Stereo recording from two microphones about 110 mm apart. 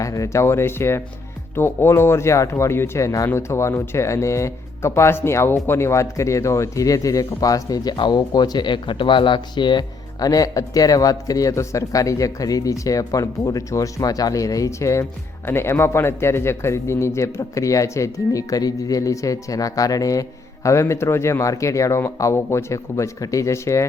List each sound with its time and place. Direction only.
0.0 s speech: 30° left (ahead or behind)